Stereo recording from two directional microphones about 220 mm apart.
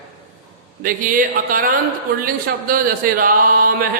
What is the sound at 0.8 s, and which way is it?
Speech, 40° right (ahead or behind).